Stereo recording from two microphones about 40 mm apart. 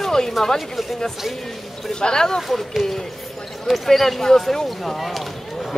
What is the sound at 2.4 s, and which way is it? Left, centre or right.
Speech, centre.